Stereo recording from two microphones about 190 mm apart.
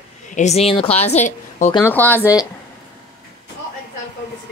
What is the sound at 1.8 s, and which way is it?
Speech, 10° left (ahead or behind).